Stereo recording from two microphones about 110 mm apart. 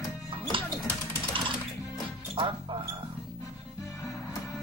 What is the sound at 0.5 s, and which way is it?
Music, 50° right (ahead or behind).